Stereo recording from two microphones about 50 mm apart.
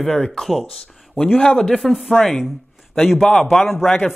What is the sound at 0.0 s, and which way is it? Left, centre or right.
Speech, centre.